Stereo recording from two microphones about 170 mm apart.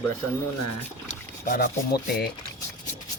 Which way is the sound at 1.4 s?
55° left (ahead or behind).